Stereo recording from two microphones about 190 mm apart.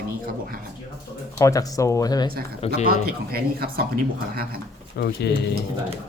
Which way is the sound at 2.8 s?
55° right (ahead or behind).